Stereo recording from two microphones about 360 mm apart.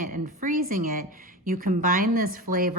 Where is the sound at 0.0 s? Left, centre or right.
Right.